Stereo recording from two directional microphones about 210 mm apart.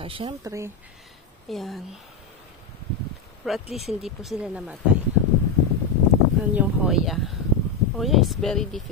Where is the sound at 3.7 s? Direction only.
Centre (ahead or behind).